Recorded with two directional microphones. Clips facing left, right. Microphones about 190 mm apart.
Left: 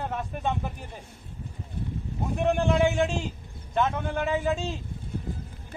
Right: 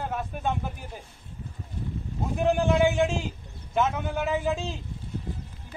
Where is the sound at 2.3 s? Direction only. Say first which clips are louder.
Right 1 dB; centre (ahead or behind).